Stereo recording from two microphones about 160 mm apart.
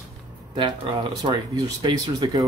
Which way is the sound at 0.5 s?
30° right (ahead or behind).